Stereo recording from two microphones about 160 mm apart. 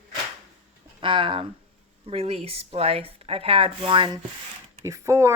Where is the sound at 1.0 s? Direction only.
30° right (ahead or behind).